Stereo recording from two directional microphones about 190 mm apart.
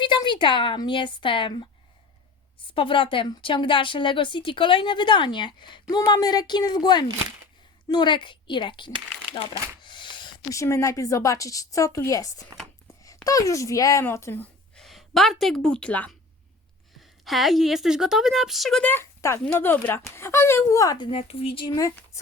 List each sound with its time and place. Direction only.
0.0 s speech: 25° left (ahead or behind)
2.7 s a woman's voice: 25° left (ahead or behind)
14.8 s a woman's voice: centre (ahead or behind); by 21.8 s 25° left (ahead or behind)
21.8 s a woman's voice: 15° left (ahead or behind)